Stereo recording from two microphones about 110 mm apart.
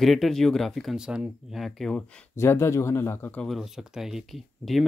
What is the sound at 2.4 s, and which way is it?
A man's voice, 25° left (ahead or behind).